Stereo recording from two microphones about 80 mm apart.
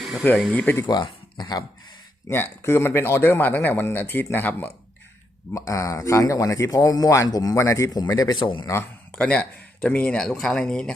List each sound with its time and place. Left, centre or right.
0.0 s a sound: centre
0.5 s speech: centre
0.9 s speech: left
2.3 s speech: left
5.5 s speech: left
7.6 s speech: left
7.9 s speech: left
8.4 s a man's voice: left
9.1 s speech: centre
10.2 s speech: centre